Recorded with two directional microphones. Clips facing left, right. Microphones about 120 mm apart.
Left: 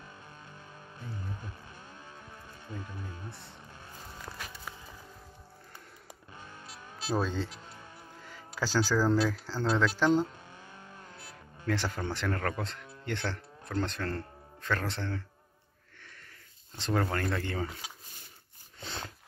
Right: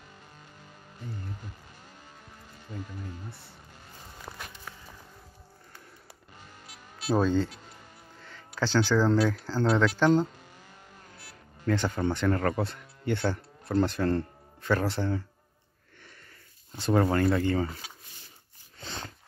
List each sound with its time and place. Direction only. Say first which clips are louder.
4.3 s walk: right 2 dB; 15° right (ahead or behind)
7.2 s speech: right 7 dB; centre (ahead or behind)
8.5 s speech: right 4 dB; 5° left (ahead or behind)
11.6 s speech: right 5 dB; centre (ahead or behind)
16.7 s speech: right 6 dB; 5° right (ahead or behind)
18.8 s a sound: right 1 dB; centre (ahead or behind)